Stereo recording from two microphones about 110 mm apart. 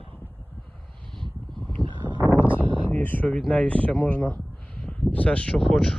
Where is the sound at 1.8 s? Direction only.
5° left (ahead or behind).